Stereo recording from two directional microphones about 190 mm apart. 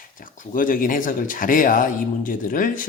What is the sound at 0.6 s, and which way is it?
A man's voice, 45° left (ahead or behind).